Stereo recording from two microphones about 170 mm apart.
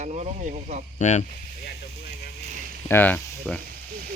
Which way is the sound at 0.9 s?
45° left (ahead or behind).